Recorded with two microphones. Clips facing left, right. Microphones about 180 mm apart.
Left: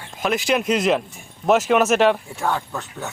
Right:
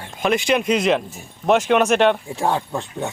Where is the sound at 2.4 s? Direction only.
30° right (ahead or behind).